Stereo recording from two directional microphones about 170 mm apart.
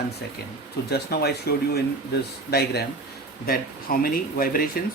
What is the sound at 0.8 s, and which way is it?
Speech, 70° left (ahead or behind).